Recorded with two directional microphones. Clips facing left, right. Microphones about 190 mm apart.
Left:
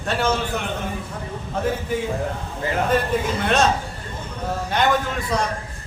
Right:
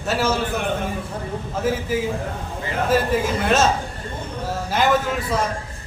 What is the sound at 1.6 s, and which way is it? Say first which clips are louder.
Speech: right 1 dB; 5° right (ahead or behind).